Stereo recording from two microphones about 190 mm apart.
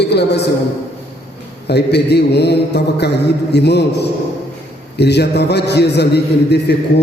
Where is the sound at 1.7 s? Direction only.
60° left (ahead or behind).